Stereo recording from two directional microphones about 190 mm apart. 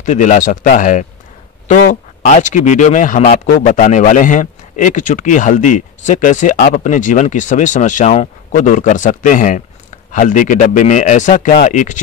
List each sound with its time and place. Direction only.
0.0 s speech: 40° left (ahead or behind)